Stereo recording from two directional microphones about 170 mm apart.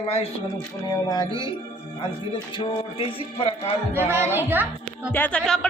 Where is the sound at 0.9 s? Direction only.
25° left (ahead or behind).